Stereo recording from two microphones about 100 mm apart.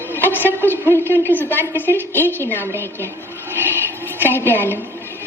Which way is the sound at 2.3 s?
20° left (ahead or behind).